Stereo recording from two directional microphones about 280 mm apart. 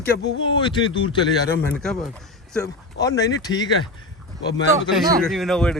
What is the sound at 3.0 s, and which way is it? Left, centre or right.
Speech, centre.